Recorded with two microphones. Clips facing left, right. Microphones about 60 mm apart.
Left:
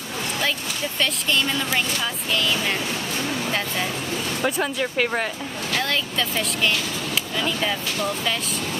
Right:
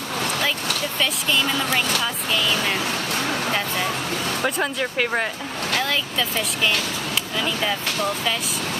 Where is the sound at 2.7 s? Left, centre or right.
Right.